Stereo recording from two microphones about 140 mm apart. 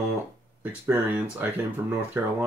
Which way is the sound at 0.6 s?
10° right (ahead or behind).